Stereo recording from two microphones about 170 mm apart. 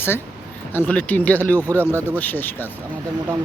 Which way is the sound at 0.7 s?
10° left (ahead or behind).